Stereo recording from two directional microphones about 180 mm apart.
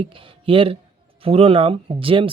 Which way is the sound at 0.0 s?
30° right (ahead or behind).